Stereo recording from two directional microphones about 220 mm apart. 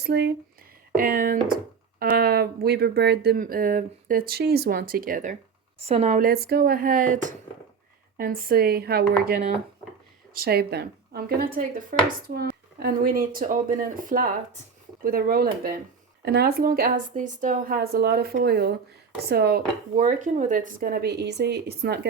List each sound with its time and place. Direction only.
0.0 s speech: 50° right (ahead or behind)